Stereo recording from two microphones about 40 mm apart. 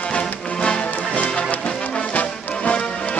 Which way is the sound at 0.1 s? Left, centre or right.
Left.